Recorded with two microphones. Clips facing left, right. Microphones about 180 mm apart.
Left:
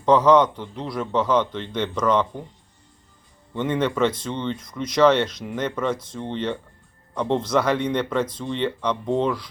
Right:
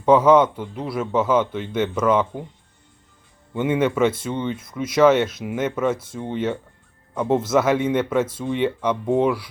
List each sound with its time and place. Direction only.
0.0 s speech: 10° right (ahead or behind)
3.5 s speech: 10° right (ahead or behind)